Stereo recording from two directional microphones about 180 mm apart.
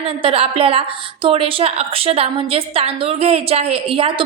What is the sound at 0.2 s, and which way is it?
A woman's voice, 30° right (ahead or behind).